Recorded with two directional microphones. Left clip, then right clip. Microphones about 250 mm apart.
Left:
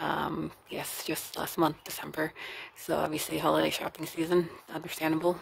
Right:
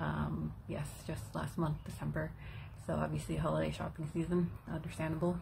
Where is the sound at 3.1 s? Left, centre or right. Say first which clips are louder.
Left 10 dB; left.